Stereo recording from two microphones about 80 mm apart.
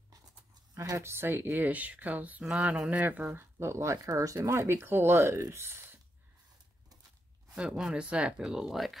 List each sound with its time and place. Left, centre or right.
0.7 s speech: right; by 2.4 s centre
2.4 s speech: centre
2.9 s speech: centre
3.5 s speech: right
7.5 s speech: centre